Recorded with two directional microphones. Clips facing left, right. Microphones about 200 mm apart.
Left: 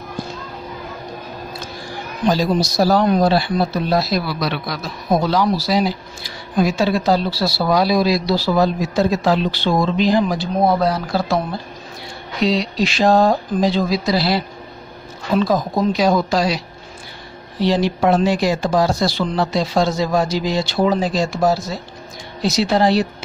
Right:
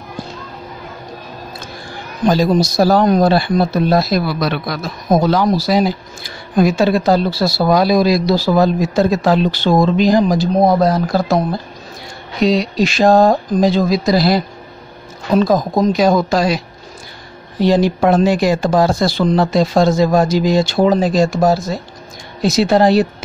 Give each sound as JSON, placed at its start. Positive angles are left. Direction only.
{"t": 2.2, "sound": "speech", "side_deg": -50}
{"t": 12.4, "sound": "speech", "side_deg": -45}